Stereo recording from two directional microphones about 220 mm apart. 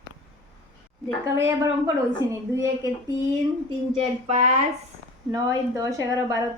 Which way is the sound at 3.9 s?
30° right (ahead or behind).